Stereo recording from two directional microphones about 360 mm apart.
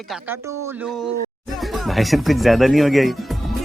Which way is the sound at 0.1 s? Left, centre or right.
Centre.